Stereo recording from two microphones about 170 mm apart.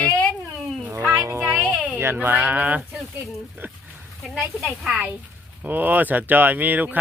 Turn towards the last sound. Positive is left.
turn(degrees=-10)  # may be behind; listen again after turning